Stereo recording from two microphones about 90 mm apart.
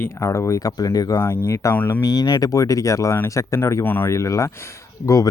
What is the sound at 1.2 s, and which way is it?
Speech, 30° left (ahead or behind).